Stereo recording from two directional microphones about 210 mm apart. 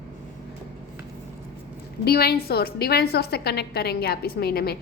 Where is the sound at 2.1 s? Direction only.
50° left (ahead or behind).